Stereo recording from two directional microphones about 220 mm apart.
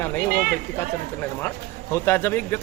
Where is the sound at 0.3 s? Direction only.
45° right (ahead or behind).